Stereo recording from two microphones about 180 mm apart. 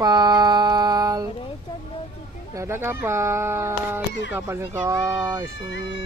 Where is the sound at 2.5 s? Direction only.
15° right (ahead or behind).